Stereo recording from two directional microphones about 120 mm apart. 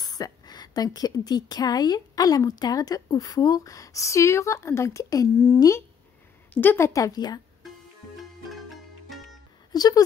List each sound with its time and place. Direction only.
0.0 s a woman's voice: 35° left (ahead or behind)
9.7 s speech: 30° left (ahead or behind)